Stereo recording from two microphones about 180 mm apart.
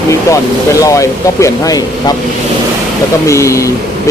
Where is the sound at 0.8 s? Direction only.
15° left (ahead or behind).